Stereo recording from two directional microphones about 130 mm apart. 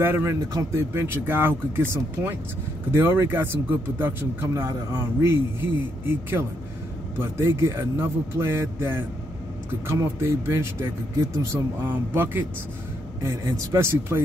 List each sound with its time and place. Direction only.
0.0 s a man's voice: 20° right (ahead or behind)